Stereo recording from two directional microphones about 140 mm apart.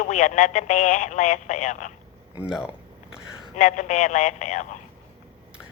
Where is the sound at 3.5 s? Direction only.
60° left (ahead or behind).